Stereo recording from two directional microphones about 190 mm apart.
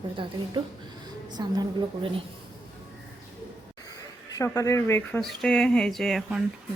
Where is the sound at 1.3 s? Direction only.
20° right (ahead or behind).